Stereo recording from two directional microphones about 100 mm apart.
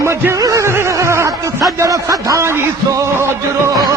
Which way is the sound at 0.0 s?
25° right (ahead or behind).